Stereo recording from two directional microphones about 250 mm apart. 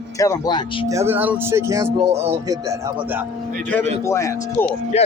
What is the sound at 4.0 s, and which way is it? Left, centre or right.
Speech, centre.